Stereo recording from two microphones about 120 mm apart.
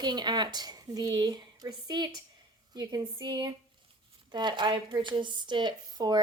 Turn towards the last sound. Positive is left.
turn(degrees=-35)  # may be behind; listen again after turning